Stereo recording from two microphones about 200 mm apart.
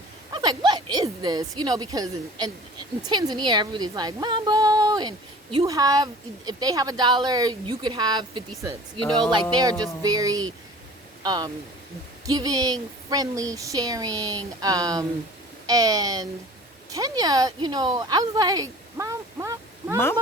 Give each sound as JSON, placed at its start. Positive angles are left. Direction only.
{"t": 0.4, "sound": "a woman's voice", "side_deg": -20}